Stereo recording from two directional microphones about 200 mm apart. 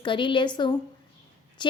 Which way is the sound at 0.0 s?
25° left (ahead or behind).